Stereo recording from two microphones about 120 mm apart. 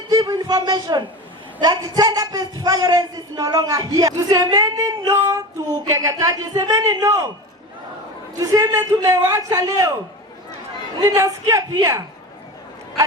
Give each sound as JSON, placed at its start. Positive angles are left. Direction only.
{"t": 0.1, "sound": "a man's voice", "side_deg": -35}
{"t": 8.4, "sound": "a man's voice", "side_deg": -30}
{"t": 11.0, "sound": "a man's voice", "side_deg": -25}